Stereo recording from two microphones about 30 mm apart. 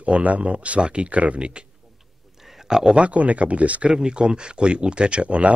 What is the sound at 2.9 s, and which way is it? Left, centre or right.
Speech, right.